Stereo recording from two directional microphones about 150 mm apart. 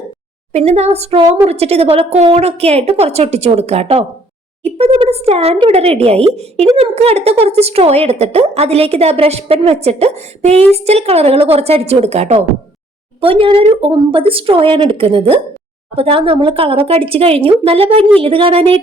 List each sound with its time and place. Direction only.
0.5 s speech: 45° right (ahead or behind)